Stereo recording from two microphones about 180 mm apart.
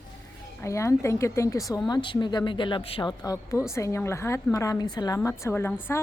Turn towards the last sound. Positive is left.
turn(degrees=10)  # may be behind; listen again after turning